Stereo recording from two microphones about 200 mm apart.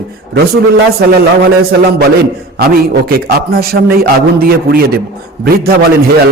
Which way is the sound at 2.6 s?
50° right (ahead or behind).